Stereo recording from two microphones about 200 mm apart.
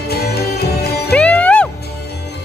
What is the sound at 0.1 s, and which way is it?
Music, 50° left (ahead or behind).